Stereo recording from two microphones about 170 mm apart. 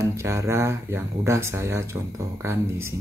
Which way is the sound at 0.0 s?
15° right (ahead or behind).